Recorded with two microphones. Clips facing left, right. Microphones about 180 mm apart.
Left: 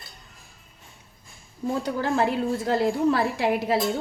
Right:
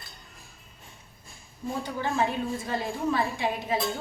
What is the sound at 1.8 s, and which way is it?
A woman's voice, 75° left (ahead or behind).